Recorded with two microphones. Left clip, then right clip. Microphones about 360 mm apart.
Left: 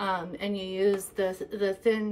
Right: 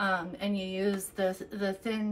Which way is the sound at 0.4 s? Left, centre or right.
Centre.